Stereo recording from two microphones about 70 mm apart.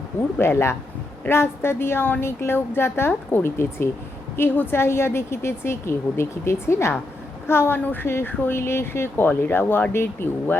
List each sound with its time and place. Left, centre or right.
0.2 s speech: left